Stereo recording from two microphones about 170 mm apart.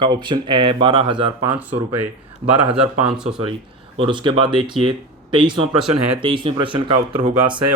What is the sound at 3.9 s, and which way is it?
Speech, 30° right (ahead or behind).